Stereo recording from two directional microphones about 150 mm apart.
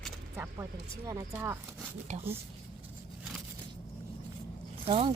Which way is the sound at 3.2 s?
5° right (ahead or behind).